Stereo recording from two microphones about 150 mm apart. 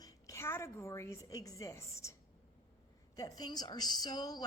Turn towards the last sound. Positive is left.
turn(degrees=25)  # may be behind; listen again after turning